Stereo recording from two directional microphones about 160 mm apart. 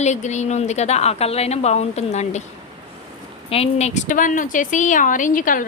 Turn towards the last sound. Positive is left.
turn(degrees=55)  # may be behind; listen again after turning